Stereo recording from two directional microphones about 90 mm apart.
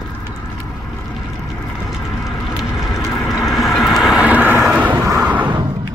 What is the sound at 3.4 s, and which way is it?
Vehicle, centre (ahead or behind).